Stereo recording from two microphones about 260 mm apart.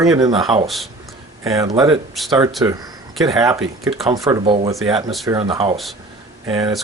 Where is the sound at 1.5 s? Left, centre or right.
Centre.